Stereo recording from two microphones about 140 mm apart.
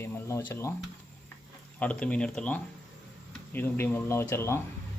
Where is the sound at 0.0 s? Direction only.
20° left (ahead or behind).